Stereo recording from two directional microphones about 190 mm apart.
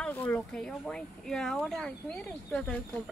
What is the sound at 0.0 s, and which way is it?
Speech, 10° left (ahead or behind).